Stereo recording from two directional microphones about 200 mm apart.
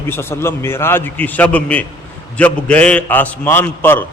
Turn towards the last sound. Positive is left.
turn(degrees=10)  # may be behind; listen again after turning